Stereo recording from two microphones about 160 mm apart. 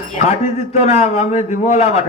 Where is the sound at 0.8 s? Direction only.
45° left (ahead or behind).